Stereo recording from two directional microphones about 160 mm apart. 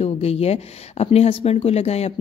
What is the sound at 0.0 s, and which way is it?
A woman's voice, 40° left (ahead or behind).